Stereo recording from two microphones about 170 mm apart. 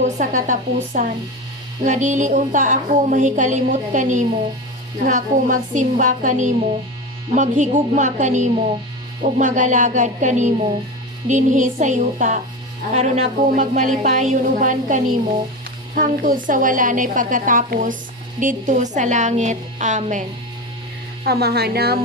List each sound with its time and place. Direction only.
0.0 s a woman's voice: 50° right (ahead or behind)
21.2 s speech: 70° right (ahead or behind)